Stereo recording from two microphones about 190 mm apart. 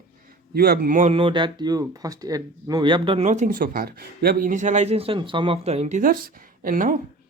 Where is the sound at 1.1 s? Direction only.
25° right (ahead or behind).